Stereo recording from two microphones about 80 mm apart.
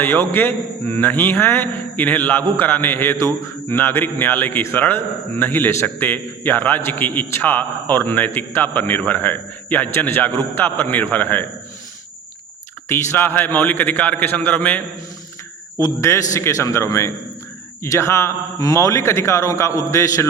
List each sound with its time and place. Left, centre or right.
0.0 s a man's voice: left
12.9 s a man's voice: left
15.8 s speech: left